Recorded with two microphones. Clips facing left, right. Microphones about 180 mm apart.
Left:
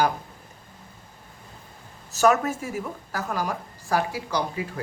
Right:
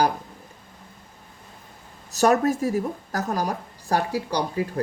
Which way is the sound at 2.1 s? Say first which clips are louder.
Right 2 dB; 35° right (ahead or behind).